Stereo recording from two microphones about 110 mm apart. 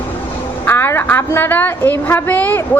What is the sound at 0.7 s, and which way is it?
A woman's voice, 20° left (ahead or behind).